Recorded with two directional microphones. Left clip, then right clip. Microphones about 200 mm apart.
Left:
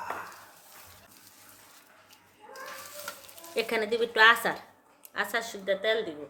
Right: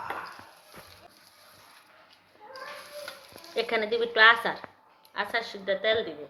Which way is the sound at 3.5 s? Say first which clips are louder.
Right 1 dB; 35° left (ahead or behind).